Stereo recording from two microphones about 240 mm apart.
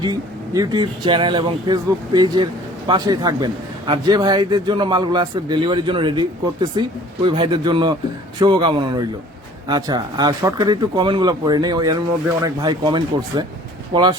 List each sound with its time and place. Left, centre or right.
0.0 s speech: centre